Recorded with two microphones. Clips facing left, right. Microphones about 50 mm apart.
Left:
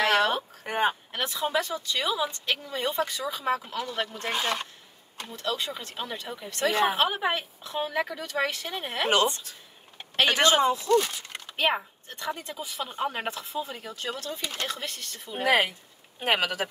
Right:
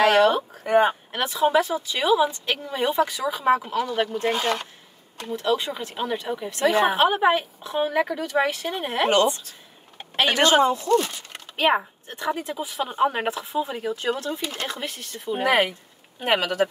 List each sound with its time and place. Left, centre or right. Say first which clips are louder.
0.1 s a sound: right 6 dB; centre
0.7 s speech: right 7 dB; centre
1.4 s a woman's voice: right 9 dB; centre
3.4 s a woman's voice: right 9 dB; right
9.9 s a sound: right 2 dB; centre
10.3 s speech: right 4 dB; right
11.5 s a woman's voice: right 6 dB; centre
16.3 s speech: right 4 dB; centre